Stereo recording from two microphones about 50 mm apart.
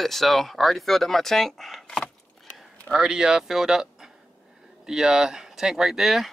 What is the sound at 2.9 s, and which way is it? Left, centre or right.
Speech, centre.